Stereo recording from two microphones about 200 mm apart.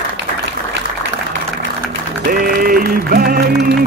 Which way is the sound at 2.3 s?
45° right (ahead or behind).